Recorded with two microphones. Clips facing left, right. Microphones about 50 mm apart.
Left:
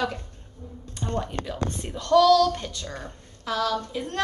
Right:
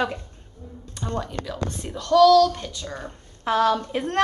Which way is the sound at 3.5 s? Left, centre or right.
Right.